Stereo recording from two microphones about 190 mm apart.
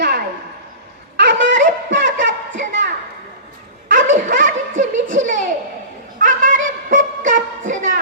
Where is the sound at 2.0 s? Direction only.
45° right (ahead or behind).